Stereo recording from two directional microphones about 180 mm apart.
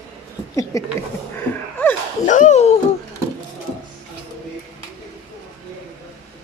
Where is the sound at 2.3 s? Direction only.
45° left (ahead or behind).